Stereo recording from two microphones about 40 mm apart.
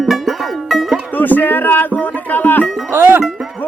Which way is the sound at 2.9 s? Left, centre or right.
Right.